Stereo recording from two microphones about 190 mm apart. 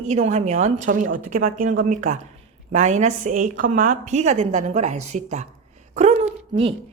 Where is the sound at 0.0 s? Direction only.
35° right (ahead or behind).